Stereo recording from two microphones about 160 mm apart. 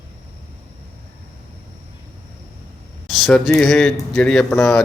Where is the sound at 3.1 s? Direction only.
Centre (ahead or behind).